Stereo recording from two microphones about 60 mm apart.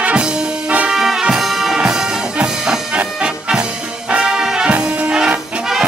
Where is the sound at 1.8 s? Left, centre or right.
Centre.